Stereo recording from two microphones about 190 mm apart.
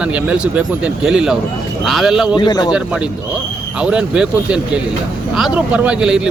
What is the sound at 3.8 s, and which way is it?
Speech, 5° right (ahead or behind).